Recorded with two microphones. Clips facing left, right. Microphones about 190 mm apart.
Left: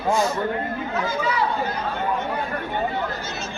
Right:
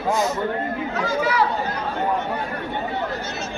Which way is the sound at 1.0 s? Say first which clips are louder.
Right 4 dB; 80° right.